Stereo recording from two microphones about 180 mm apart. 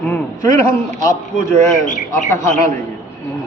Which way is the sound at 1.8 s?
45° left (ahead or behind).